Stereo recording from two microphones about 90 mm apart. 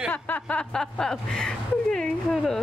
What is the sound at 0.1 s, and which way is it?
Speech, 15° left (ahead or behind).